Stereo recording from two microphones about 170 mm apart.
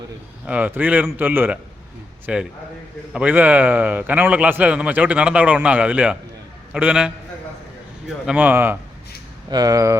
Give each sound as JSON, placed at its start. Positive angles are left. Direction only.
{"t": 0.4, "sound": "a man's voice", "side_deg": -10}
{"t": 8.3, "sound": "a man's voice", "side_deg": -10}
{"t": 9.5, "sound": "speech", "side_deg": -20}